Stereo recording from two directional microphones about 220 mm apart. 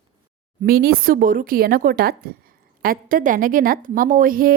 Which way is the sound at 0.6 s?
40° right (ahead or behind).